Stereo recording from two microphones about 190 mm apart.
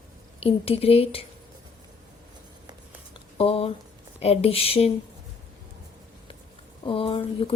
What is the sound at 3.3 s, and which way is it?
A woman's voice, 30° left (ahead or behind).